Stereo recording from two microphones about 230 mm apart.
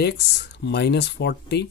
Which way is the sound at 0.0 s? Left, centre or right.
Left.